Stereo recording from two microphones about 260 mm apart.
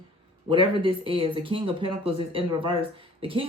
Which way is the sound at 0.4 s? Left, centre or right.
Centre.